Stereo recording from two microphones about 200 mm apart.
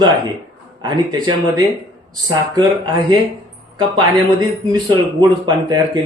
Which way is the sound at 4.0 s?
20° right (ahead or behind).